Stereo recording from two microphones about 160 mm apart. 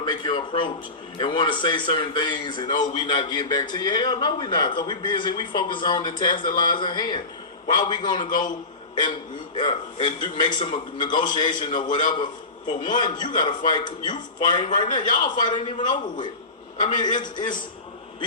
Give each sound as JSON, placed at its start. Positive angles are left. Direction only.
{"t": 0.0, "sound": "a man's voice", "side_deg": 30}
{"t": 9.6, "sound": "a man's voice", "side_deg": 30}